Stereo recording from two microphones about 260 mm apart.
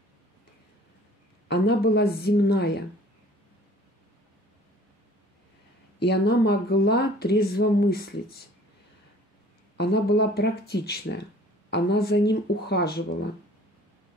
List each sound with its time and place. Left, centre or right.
1.5 s speech: left
5.9 s speech: left
9.8 s speech: left